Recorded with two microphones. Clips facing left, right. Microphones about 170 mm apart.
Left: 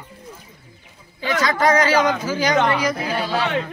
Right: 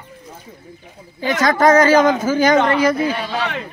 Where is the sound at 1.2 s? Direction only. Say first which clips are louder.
Right 4 dB; 45° right (ahead or behind).